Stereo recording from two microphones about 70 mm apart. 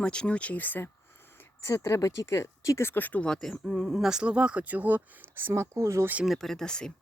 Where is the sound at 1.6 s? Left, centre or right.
Left.